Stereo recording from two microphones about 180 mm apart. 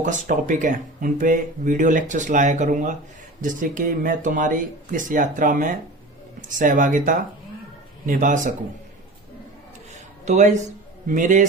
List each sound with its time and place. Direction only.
0.0 s speech: 45° right (ahead or behind)
10.2 s speech: 40° right (ahead or behind)